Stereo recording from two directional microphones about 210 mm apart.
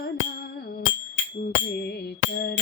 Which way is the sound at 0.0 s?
50° left (ahead or behind).